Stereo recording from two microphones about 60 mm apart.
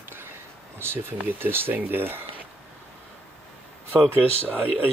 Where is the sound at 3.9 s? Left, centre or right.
Right.